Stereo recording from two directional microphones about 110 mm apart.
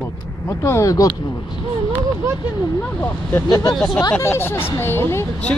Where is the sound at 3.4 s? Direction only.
35° left (ahead or behind).